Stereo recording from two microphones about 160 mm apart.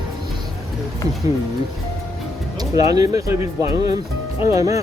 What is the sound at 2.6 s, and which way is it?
Speech, 20° right (ahead or behind).